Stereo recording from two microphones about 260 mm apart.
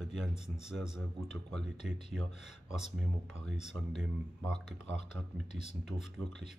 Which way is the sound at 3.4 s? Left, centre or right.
Centre.